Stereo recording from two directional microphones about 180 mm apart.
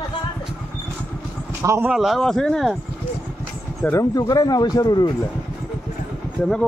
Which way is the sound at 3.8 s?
20° left (ahead or behind).